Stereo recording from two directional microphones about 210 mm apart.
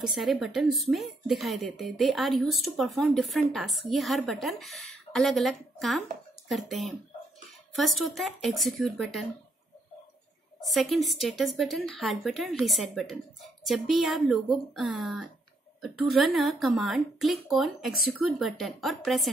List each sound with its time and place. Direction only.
0.0 s a woman's voice: centre (ahead or behind)
10.6 s a woman's voice: centre (ahead or behind)